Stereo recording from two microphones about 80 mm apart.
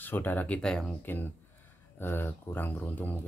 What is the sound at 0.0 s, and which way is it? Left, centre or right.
Speech, left.